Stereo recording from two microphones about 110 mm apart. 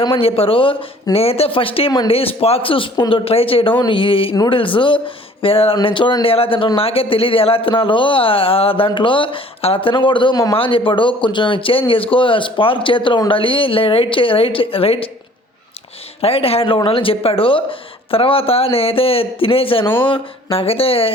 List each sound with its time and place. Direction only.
0.0 s speech: 55° left (ahead or behind)
5.7 s speech: 45° left (ahead or behind)
6.3 s speech: 55° left (ahead or behind); by 10.5 s 40° left (ahead or behind)
10.5 s speech: 55° left (ahead or behind)
16.2 s speech: 60° left (ahead or behind)